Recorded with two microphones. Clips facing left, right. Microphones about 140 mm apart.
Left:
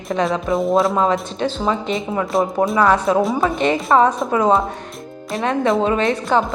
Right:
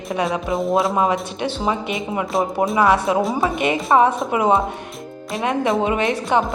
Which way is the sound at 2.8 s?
15° right (ahead or behind).